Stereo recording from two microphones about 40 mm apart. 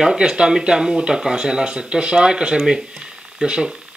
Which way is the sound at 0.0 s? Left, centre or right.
Centre.